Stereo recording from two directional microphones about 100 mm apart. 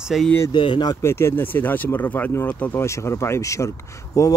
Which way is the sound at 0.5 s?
55° left (ahead or behind).